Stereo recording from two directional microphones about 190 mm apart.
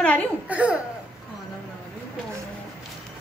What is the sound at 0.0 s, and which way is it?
Speech, 5° left (ahead or behind).